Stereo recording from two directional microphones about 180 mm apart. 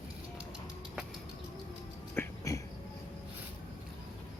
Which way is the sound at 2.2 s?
15° left (ahead or behind).